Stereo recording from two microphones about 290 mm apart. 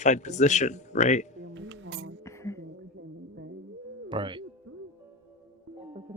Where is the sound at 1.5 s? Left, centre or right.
Right.